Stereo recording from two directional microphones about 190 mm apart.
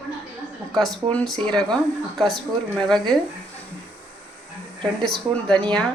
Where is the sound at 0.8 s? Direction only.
5° left (ahead or behind).